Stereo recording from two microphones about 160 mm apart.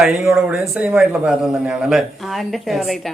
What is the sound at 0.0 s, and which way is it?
A man's voice, 5° right (ahead or behind).